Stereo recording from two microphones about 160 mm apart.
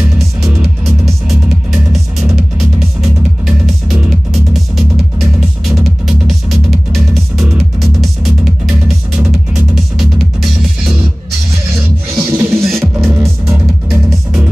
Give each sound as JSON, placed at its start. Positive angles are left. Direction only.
{"t": 0.8, "sound": "music", "side_deg": 0}
{"t": 12.2, "sound": "music", "side_deg": -15}